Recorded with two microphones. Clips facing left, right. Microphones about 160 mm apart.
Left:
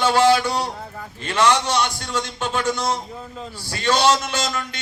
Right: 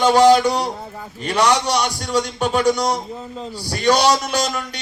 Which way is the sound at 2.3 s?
15° right (ahead or behind).